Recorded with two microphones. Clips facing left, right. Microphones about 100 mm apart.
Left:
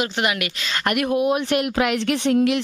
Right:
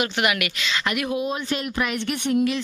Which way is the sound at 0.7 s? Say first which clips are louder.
Left 4 dB; 50° left (ahead or behind).